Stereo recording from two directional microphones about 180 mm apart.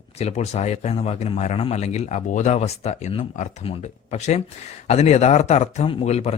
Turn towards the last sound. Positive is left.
turn(degrees=35)  # may be behind; listen again after turning